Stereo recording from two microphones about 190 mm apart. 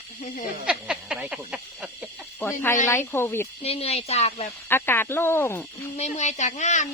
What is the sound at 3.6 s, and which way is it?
Speech, 30° left (ahead or behind).